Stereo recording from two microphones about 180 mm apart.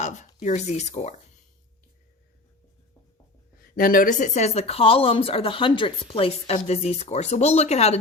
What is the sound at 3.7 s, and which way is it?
Speech, 50° left (ahead or behind).